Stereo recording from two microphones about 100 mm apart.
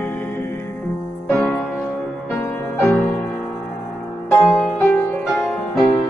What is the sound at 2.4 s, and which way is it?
Music, 20° left (ahead or behind).